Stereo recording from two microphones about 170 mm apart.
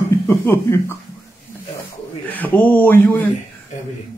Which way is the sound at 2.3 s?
10° left (ahead or behind).